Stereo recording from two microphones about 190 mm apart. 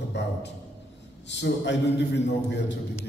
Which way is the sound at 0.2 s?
65° left (ahead or behind).